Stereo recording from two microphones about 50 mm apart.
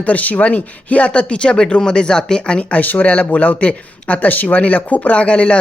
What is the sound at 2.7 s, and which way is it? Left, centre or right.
Speech, left.